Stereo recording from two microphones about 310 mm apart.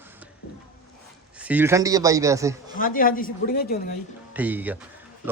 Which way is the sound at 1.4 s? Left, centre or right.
Centre.